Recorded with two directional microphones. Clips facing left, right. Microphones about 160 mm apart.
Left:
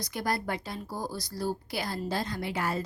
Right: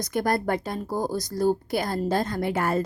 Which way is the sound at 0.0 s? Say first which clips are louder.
Right 7 dB; 50° right (ahead or behind).